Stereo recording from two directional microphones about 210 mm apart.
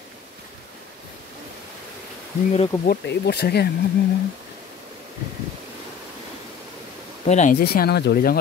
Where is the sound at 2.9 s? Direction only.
50° left (ahead or behind).